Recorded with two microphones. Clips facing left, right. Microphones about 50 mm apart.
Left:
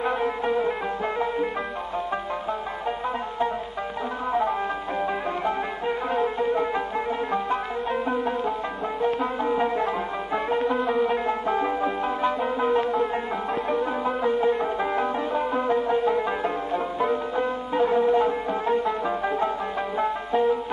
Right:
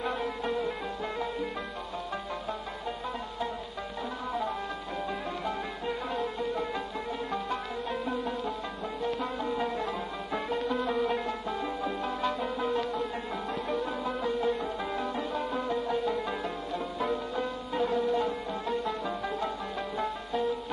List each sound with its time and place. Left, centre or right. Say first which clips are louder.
0.0 s music: left 7 dB; left
4.3 s music: left 10 dB; left
7.9 s music: left 7 dB; left
11.2 s music: left 9 dB; left